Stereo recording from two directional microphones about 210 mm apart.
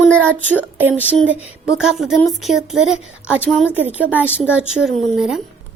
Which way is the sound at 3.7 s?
10° right (ahead or behind).